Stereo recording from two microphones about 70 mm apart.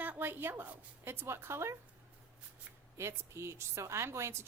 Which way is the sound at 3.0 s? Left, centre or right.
Right.